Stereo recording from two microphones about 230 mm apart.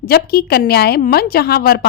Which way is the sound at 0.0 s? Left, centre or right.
Left.